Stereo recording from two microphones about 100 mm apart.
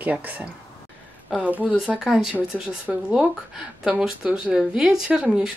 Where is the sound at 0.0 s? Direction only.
15° right (ahead or behind).